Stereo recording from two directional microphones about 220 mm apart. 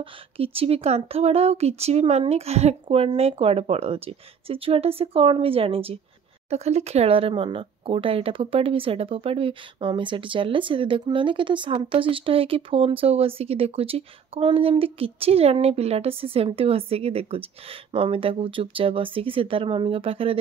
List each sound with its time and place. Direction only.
0.0 s speech: 25° right (ahead or behind)